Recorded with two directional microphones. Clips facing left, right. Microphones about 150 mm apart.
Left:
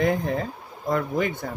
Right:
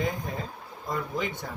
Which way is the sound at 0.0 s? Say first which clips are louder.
Left 8 dB; 70° left (ahead or behind).